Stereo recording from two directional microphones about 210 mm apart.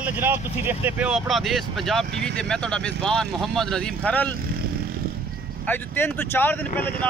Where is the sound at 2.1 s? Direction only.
55° right (ahead or behind).